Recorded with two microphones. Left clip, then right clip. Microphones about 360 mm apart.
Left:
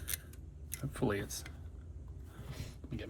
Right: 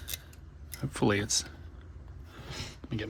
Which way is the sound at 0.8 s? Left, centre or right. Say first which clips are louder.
Right 7 dB; centre.